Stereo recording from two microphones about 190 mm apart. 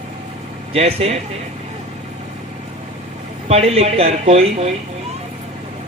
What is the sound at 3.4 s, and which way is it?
A man's voice, 30° right (ahead or behind).